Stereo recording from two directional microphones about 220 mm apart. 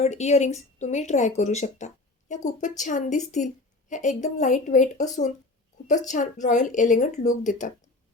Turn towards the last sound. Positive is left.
turn(degrees=35)  # may be behind; listen again after turning